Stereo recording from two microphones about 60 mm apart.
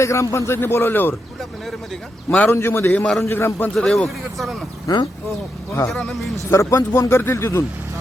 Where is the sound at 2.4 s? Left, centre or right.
Left.